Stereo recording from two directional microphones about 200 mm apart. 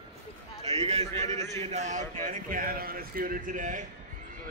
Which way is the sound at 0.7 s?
30° right (ahead or behind).